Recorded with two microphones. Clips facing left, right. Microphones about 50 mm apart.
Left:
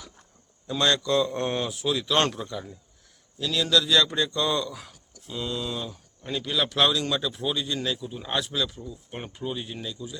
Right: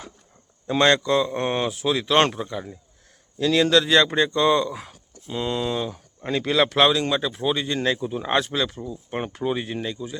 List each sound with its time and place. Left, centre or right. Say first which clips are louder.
0.7 s speech: right 5 dB; right
3.3 s speech: right 6 dB; right
6.2 s speech: right 7 dB; right
6.7 s speech: right 5 dB; right
7.3 s speech: right 5 dB; right
9.0 s speech: right 8 dB; right
9.8 s speech: right 6 dB; right